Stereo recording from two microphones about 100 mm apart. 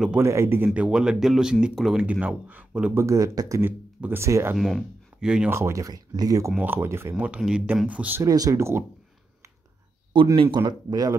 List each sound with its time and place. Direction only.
0.2 s speech: 25° right (ahead or behind)
0.7 s speech: 10° right (ahead or behind)
2.9 s speech: 30° right (ahead or behind)
3.6 s speech: 20° right (ahead or behind)
4.6 s speech: centre (ahead or behind)
5.5 s speech: 30° right (ahead or behind)
6.6 s speech: 20° right (ahead or behind)
7.2 s speech: 10° right (ahead or behind)
8.2 s speech: 35° right (ahead or behind)
10.3 s speech: 60° right (ahead or behind)
10.6 s speech: 40° right (ahead or behind)